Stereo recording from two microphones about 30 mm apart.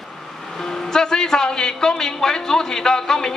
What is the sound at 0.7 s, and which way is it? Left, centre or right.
A man's voice, centre.